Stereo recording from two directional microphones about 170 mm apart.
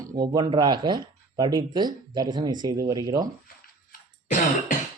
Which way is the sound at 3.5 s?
60° left (ahead or behind).